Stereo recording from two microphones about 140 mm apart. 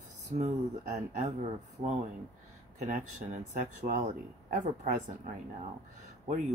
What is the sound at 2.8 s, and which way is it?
Speech, 55° right (ahead or behind).